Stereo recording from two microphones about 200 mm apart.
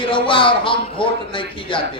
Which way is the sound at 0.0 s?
25° left (ahead or behind).